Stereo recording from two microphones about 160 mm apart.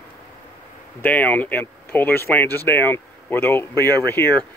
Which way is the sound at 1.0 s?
10° left (ahead or behind).